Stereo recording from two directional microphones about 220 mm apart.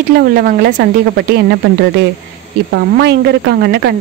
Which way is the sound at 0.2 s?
45° right (ahead or behind).